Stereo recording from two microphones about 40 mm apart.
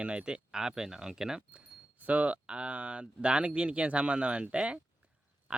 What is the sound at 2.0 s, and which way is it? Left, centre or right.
Speech, right.